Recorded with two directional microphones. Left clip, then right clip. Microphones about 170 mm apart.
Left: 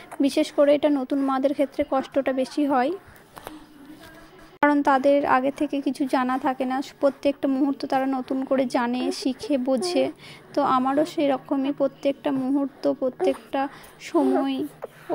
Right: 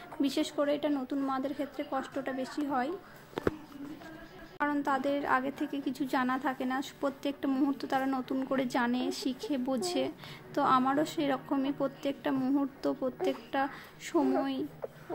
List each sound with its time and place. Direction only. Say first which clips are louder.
0.2 s a woman's voice: left 11 dB; 35° left (ahead or behind)
4.6 s a woman's voice: left 12 dB; 40° left (ahead or behind)